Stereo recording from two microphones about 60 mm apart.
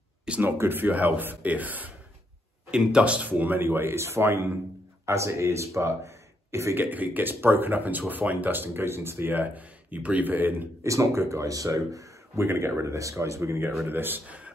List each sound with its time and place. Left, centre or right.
0.4 s speech: right
2.7 s speech: centre; by 4.5 s right
5.0 s speech: right
6.8 s speech: right
10.8 s speech: right
12.4 s speech: right
13.8 s speech: right